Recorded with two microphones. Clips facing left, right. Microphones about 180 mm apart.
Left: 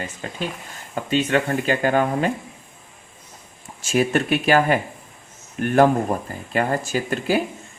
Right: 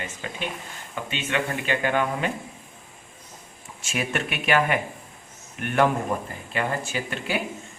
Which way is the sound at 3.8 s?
35° left (ahead or behind).